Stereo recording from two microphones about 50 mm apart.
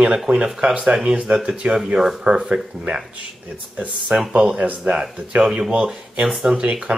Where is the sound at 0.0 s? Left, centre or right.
Right.